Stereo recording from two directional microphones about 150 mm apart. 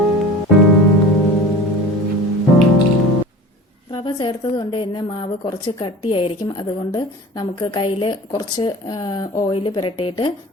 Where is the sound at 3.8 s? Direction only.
35° left (ahead or behind).